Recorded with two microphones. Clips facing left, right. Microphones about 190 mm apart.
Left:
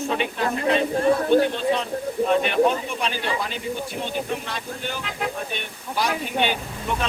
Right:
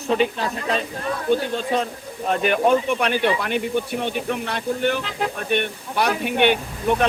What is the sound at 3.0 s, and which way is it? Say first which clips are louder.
Speech: right 5 dB; 60° right (ahead or behind).